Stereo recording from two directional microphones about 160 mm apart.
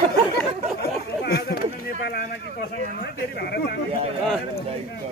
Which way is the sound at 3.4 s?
90° left.